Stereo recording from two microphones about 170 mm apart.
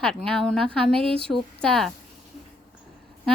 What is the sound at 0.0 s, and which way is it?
A woman's voice, 5° left (ahead or behind).